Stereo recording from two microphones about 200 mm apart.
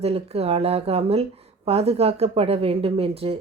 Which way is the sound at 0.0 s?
30° right (ahead or behind).